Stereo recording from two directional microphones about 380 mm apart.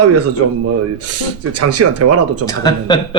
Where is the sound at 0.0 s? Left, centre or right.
Right.